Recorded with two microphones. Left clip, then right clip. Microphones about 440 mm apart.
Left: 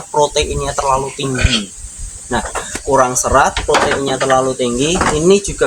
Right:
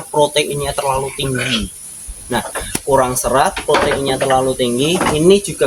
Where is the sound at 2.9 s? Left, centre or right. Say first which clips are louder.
Left 2 dB; right.